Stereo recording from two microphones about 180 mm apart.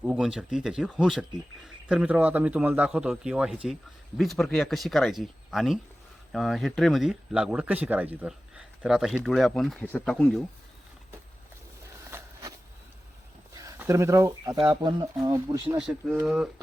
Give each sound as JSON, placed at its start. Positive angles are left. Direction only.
{"t": 0.0, "sound": "speech", "side_deg": -5}
{"t": 12.1, "sound": "walk", "side_deg": -20}
{"t": 13.6, "sound": "speech", "side_deg": -15}
{"t": 16.2, "sound": "speech", "side_deg": -5}